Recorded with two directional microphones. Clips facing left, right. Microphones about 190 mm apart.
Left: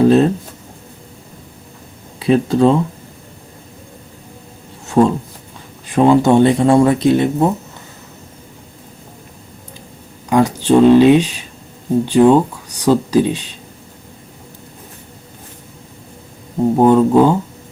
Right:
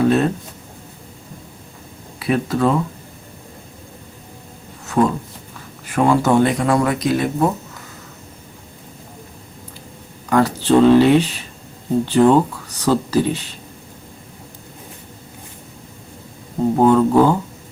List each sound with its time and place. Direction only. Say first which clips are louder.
0.0 s speech: left 5 dB; 30° left (ahead or behind)
2.1 s speech: left 6 dB; 25° left (ahead or behind)
4.9 s speech: left 4 dB; 25° left (ahead or behind)
10.2 s speech: left 2 dB; 15° left (ahead or behind)
16.7 s speech: left 3 dB; 20° left (ahead or behind)